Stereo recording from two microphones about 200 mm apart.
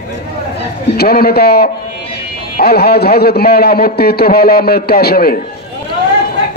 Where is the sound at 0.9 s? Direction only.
50° left (ahead or behind).